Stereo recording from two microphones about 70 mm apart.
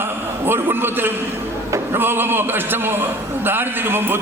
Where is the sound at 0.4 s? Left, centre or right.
Right.